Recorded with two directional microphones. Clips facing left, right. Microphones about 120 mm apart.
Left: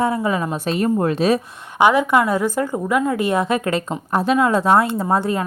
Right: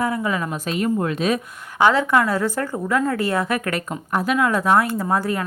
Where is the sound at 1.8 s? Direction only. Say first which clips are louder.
Left 2 dB; 15° left (ahead or behind).